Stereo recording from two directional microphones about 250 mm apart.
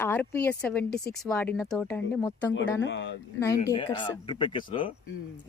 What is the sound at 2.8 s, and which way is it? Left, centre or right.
Speech, left.